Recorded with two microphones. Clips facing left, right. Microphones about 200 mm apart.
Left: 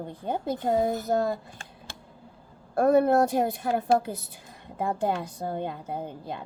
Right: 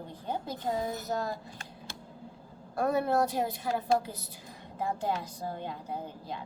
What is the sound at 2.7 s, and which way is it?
A woman's voice, 55° left (ahead or behind).